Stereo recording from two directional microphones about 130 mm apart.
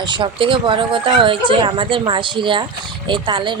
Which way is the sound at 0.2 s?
40° right (ahead or behind).